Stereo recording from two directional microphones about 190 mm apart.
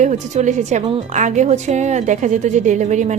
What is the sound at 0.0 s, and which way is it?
Speech, 40° right (ahead or behind).